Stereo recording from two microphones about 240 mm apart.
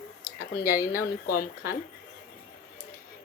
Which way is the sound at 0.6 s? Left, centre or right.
Centre.